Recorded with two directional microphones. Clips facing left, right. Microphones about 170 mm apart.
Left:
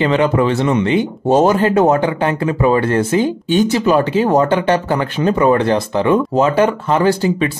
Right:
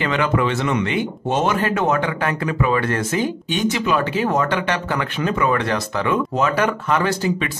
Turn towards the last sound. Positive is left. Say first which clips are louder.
# left 5 dB
turn(degrees=30)  # may be behind; listen again after turning